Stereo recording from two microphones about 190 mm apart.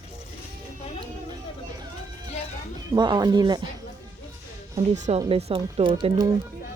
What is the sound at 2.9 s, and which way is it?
Speech, 20° right (ahead or behind).